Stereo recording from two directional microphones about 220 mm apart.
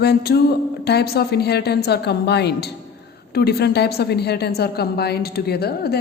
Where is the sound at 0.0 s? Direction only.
45° left (ahead or behind).